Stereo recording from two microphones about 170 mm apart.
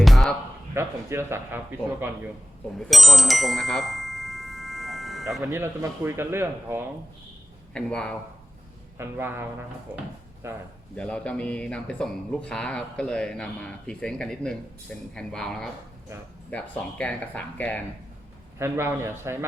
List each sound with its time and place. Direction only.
0.0 s a sound: centre (ahead or behind)
0.7 s speech: 15° right (ahead or behind)
2.7 s bicycle bell: centre (ahead or behind)
5.4 s speech: 15° right (ahead or behind)
7.7 s speech: 5° left (ahead or behind)
9.0 s speech: 15° right (ahead or behind)
10.9 s speech: 5° left (ahead or behind)
18.6 s speech: 15° right (ahead or behind)